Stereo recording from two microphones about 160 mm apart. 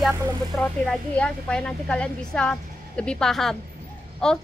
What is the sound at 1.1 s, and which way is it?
Speech, 5° left (ahead or behind).